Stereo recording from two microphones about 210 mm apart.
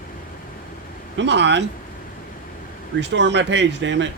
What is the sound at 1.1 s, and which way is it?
Speech, 55° right (ahead or behind).